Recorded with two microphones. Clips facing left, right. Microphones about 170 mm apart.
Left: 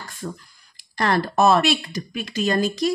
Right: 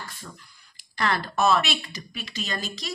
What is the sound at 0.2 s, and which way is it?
Speech, 50° left (ahead or behind).